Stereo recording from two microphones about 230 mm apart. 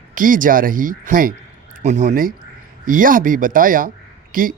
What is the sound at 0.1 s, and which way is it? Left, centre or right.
A man's voice, right.